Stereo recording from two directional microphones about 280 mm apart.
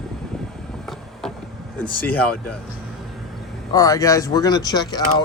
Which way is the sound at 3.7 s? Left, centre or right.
Centre.